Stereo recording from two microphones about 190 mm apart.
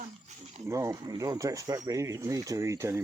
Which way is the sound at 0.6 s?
15° right (ahead or behind).